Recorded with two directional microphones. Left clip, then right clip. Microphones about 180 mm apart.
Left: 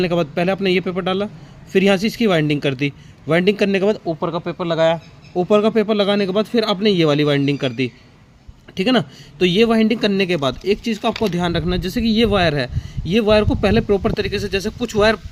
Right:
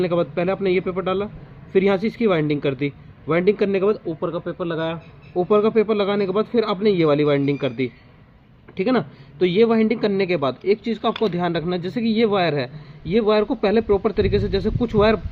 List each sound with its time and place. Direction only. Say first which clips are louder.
0.0 s a man's voice: left 2 dB; 45° left (ahead or behind)
5.4 s a man's voice: left 2 dB; 45° left (ahead or behind)